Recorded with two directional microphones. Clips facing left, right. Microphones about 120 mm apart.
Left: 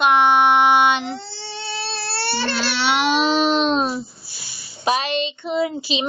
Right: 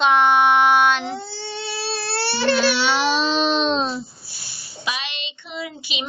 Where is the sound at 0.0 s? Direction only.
10° left (ahead or behind).